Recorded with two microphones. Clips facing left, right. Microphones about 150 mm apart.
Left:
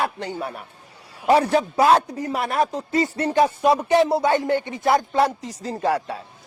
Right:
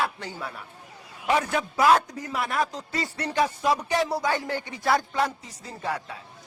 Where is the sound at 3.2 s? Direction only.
45° left (ahead or behind).